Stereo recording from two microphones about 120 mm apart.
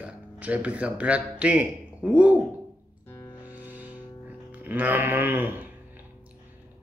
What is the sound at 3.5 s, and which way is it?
Music, 10° right (ahead or behind).